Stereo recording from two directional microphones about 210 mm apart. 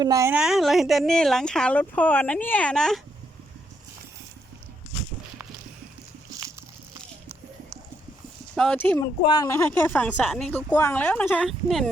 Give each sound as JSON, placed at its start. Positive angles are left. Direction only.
{"t": 0.0, "sound": "a woman's voice", "side_deg": -15}
{"t": 0.3, "sound": "speech", "side_deg": 0}
{"t": 8.5, "sound": "speech", "side_deg": 5}
{"t": 9.2, "sound": "a woman's voice", "side_deg": 20}